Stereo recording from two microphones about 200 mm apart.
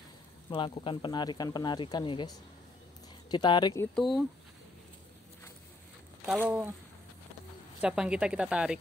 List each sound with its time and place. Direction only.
0.5 s speech: 25° left (ahead or behind)
3.9 s speech: centre (ahead or behind)
6.2 s speech: 5° right (ahead or behind)
7.8 s speech: 5° right (ahead or behind)